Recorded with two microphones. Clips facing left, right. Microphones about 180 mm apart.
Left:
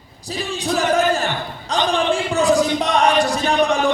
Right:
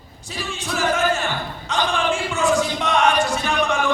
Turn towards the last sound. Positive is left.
turn(degrees=35)  # may be behind; listen again after turning